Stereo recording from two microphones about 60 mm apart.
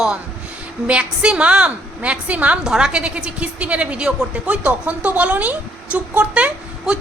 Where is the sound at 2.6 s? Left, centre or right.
Centre.